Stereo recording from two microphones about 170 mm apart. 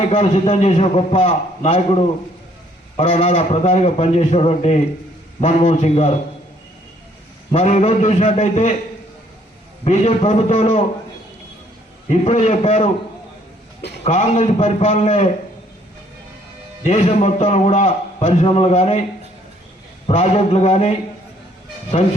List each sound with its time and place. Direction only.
0.1 s a man's voice: 35° left (ahead or behind)
7.5 s a man's voice: 40° left (ahead or behind)
9.8 s a man's voice: 40° left (ahead or behind)
12.0 s a man's voice: 35° left (ahead or behind)
14.0 s a man's voice: 40° left (ahead or behind)
16.8 s a man's voice: 40° left (ahead or behind)
20.1 s a man's voice: 35° left (ahead or behind)